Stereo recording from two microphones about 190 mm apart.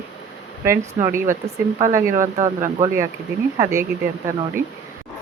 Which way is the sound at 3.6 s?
15° right (ahead or behind).